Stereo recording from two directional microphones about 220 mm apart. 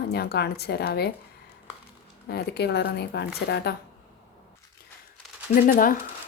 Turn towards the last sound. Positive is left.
turn(degrees=40)  # may be behind; listen again after turning